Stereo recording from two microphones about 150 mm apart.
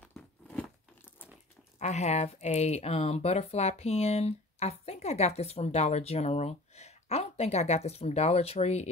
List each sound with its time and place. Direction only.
0.1 s crunch: 10° left (ahead or behind)
1.8 s speech: 50° left (ahead or behind)